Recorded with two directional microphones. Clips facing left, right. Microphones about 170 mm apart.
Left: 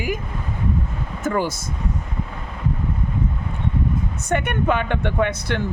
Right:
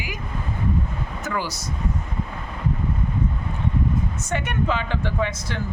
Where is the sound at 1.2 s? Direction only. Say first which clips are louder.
Left 7 dB; 50° left (ahead or behind).